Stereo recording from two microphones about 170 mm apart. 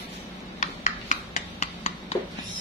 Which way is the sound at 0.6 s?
45° left (ahead or behind).